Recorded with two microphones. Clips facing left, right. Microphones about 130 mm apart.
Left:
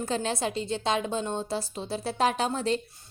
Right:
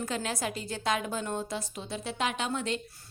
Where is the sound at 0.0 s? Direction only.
30° left (ahead or behind).